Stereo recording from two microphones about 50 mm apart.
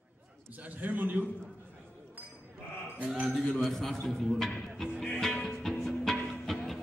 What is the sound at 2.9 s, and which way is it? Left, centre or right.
Speech, right.